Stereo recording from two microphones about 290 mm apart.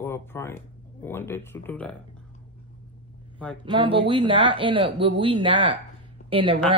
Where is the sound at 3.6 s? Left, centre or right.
Centre.